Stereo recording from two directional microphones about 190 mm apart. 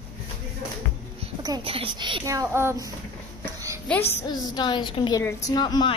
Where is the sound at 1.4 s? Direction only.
25° right (ahead or behind).